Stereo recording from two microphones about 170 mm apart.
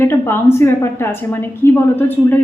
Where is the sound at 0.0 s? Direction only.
15° left (ahead or behind).